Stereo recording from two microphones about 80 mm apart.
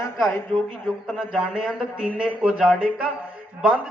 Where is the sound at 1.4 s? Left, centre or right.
Centre.